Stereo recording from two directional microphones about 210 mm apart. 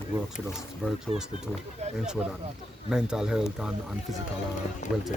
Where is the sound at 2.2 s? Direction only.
5° right (ahead or behind).